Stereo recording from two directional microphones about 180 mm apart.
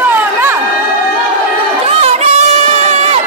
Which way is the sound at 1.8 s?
35° right (ahead or behind).